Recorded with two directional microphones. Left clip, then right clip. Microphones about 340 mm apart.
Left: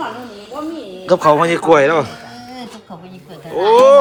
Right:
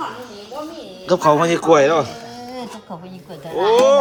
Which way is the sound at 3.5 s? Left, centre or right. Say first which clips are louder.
Left 5 dB; centre.